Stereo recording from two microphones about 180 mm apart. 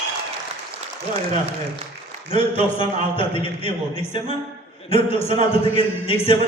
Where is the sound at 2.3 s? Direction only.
30° left (ahead or behind).